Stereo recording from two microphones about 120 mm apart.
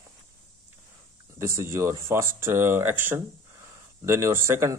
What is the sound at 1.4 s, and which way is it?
Speech, 25° right (ahead or behind).